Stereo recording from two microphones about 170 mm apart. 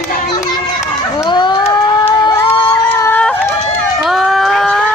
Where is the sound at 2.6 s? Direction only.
15° left (ahead or behind).